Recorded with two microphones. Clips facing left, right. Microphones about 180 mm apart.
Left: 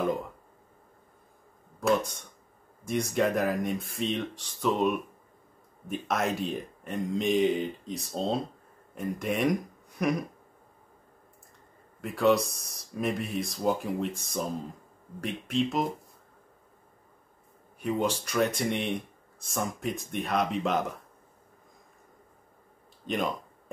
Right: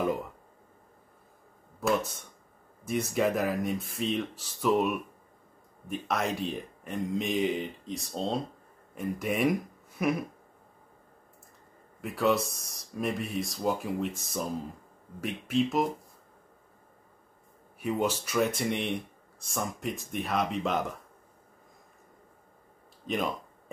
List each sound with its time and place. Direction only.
1.8 s speech: 5° right (ahead or behind)
12.0 s speech: centre (ahead or behind)
17.7 s speech: 5° right (ahead or behind)
23.0 s speech: centre (ahead or behind)